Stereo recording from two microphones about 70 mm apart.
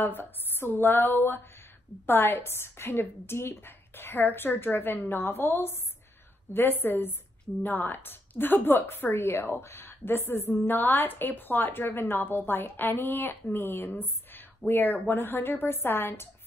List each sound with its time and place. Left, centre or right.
0.0 s a woman's voice: left